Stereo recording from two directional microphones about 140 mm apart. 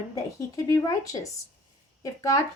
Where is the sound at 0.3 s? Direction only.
20° left (ahead or behind).